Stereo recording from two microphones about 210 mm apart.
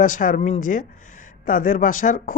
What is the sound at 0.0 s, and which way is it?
Speech, 40° left (ahead or behind).